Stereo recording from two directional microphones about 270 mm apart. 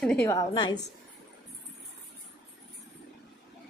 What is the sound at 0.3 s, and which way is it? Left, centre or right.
Speech, centre.